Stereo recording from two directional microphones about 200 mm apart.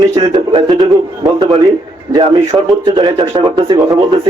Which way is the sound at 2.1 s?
20° right (ahead or behind).